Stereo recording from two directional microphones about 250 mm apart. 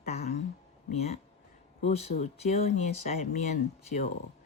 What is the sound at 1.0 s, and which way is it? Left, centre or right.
Speech, left.